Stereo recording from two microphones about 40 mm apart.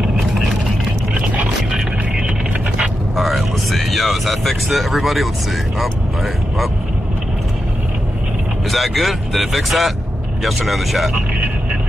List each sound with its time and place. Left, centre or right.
0.0 s vehicle: centre
1.7 s music: centre
3.2 s vehicle: centre
5.8 s speech: centre
8.6 s speech: centre